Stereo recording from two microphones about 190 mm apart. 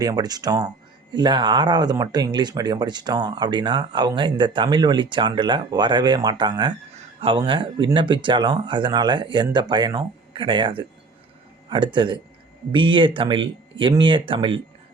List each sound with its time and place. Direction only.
0.0 s speech: 20° right (ahead or behind)